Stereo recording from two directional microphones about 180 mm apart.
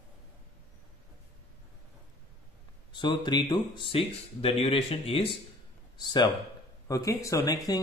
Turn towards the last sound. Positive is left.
turn(degrees=15)  # may be behind; listen again after turning